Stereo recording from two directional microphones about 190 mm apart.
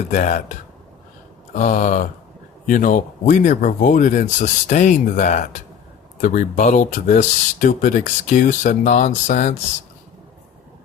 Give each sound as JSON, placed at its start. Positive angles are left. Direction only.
{"t": 0.1, "sound": "speech", "side_deg": 40}
{"t": 1.5, "sound": "speech", "side_deg": 40}